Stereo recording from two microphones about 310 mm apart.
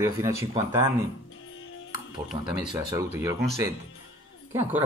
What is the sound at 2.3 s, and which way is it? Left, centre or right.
Speech, centre.